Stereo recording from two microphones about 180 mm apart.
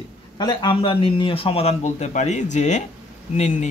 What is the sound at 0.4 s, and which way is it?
A man's voice, 25° left (ahead or behind).